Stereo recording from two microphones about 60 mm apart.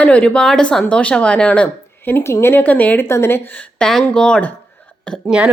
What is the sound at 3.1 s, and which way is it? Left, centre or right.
Speech, left.